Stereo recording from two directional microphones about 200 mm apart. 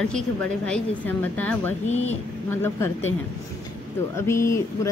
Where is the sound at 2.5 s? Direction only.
10° left (ahead or behind).